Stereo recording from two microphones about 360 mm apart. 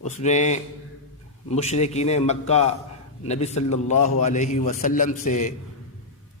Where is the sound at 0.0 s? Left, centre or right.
Centre.